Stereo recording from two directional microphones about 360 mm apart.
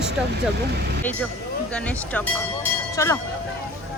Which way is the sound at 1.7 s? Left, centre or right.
Centre.